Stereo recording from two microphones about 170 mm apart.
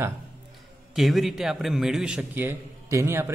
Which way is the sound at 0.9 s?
Centre (ahead or behind).